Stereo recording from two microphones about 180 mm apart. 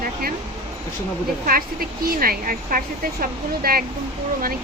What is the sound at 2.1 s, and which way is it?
Speech, 55° right (ahead or behind).